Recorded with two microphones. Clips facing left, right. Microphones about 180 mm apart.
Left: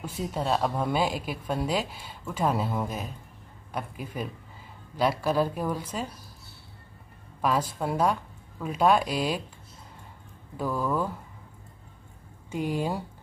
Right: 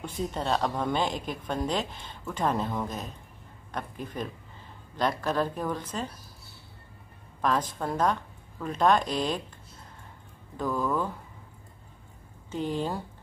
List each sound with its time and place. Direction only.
0.0 s a woman's voice: 5° left (ahead or behind)
7.4 s a woman's voice: 10° left (ahead or behind)
10.6 s a woman's voice: 10° left (ahead or behind)
12.4 s a woman's voice: 10° left (ahead or behind)